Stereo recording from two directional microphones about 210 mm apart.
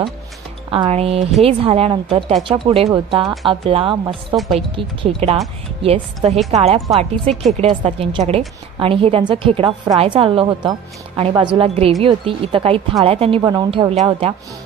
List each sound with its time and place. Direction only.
0.7 s a woman's voice: 25° right (ahead or behind)